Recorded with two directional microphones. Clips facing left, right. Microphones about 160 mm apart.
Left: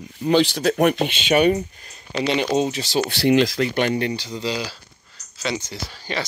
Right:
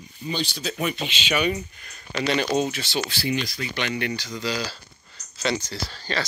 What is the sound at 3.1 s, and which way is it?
Speech, 80° left.